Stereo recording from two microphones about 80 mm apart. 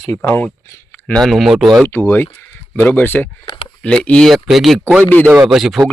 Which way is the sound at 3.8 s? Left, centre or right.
Centre.